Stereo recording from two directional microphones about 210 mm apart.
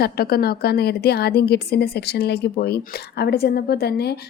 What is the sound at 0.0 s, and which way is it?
A woman's voice, 45° left (ahead or behind).